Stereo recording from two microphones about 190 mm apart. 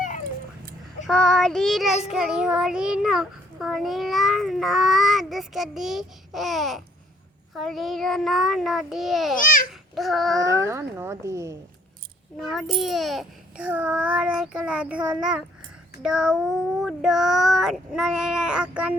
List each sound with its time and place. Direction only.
1.0 s a child's voice: 5° left (ahead or behind)
9.4 s babbling: 45° left (ahead or behind)
9.9 s a child's voice: centre (ahead or behind)
10.4 s speech: 15° right (ahead or behind)
12.4 s a child's voice: centre (ahead or behind)